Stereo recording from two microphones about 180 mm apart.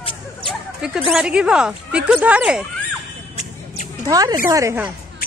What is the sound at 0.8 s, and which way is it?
Speech, centre (ahead or behind).